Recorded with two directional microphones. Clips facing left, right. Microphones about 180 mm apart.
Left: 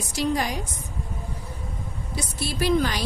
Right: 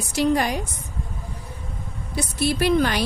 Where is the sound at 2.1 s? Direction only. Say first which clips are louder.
Right 8 dB; 60° right (ahead or behind).